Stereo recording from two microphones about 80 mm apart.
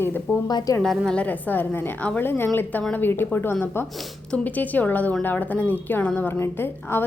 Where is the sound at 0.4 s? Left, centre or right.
Left.